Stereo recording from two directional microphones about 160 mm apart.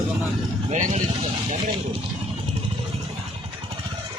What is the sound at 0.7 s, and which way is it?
Speech, 45° right (ahead or behind).